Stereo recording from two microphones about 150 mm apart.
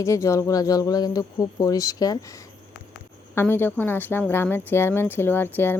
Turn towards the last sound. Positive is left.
turn(degrees=15)  # may be behind; listen again after turning